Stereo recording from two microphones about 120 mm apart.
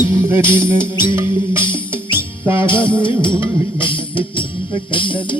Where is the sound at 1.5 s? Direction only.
45° left (ahead or behind).